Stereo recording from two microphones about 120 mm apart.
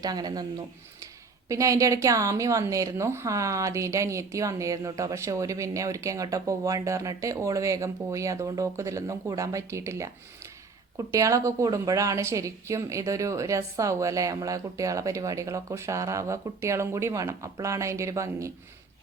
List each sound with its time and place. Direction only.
0.0 s speech: 35° right (ahead or behind)
1.5 s a woman's voice: 25° right (ahead or behind)